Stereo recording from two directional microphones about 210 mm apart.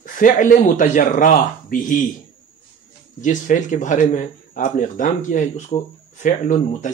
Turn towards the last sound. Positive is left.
turn(degrees=35)  # may be behind; listen again after turning